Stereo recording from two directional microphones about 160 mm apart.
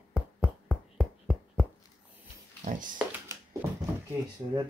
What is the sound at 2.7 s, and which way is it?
Speech, 55° right (ahead or behind).